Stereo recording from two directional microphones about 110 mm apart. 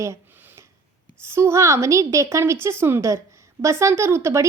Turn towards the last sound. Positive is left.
turn(degrees=-25)  # may be behind; listen again after turning